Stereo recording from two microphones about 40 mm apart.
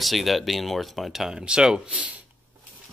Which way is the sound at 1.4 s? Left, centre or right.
Centre.